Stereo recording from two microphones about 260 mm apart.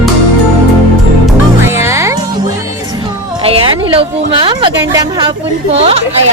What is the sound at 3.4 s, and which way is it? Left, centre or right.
Music, right.